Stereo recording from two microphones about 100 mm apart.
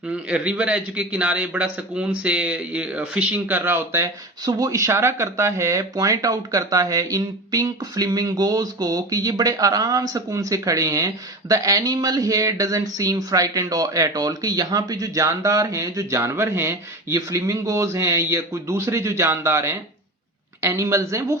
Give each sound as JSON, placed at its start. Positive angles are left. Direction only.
{"t": 0.1, "sound": "a man's voice", "side_deg": -10}
{"t": 4.4, "sound": "speech", "side_deg": -35}